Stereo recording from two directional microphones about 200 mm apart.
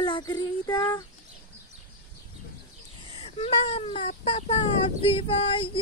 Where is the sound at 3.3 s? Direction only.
30° left (ahead or behind).